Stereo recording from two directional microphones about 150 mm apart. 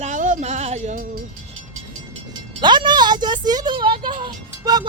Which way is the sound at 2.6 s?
30° right (ahead or behind).